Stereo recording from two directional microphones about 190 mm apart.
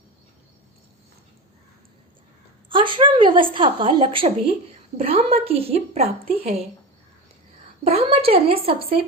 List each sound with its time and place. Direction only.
2.6 s a woman's voice: 25° right (ahead or behind)
7.9 s a woman's voice: 30° right (ahead or behind)